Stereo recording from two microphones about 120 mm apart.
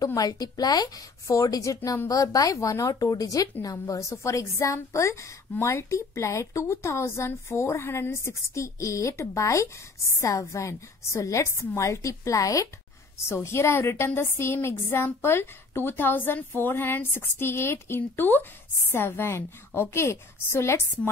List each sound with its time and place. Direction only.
0.0 s a woman's voice: 30° left (ahead or behind)